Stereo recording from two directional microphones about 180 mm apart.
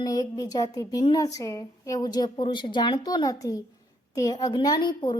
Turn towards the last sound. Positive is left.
turn(degrees=25)  # may be behind; listen again after turning